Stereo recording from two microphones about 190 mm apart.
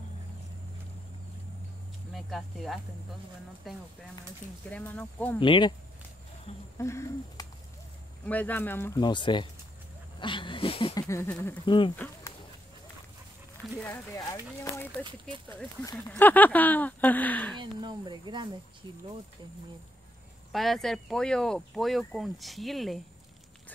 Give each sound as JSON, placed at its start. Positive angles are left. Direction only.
{"t": 2.1, "sound": "speech", "side_deg": 0}
{"t": 4.6, "sound": "speech", "side_deg": 5}
{"t": 5.4, "sound": "a sound", "side_deg": 25}
{"t": 6.8, "sound": "speech", "side_deg": 15}
{"t": 9.0, "sound": "a sound", "side_deg": 25}
{"t": 11.1, "sound": "speech", "side_deg": 10}
{"t": 11.6, "sound": "a sound", "side_deg": 25}
{"t": 13.7, "sound": "speech", "side_deg": 15}
{"t": 15.0, "sound": "speech", "side_deg": -25}
{"t": 16.1, "sound": "speech", "side_deg": 10}
{"t": 17.6, "sound": "speech", "side_deg": -25}
{"t": 20.5, "sound": "speech", "side_deg": 0}